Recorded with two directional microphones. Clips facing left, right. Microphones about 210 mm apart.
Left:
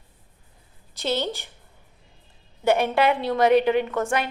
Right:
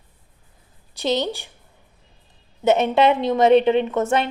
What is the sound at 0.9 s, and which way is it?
Speech, 15° right (ahead or behind).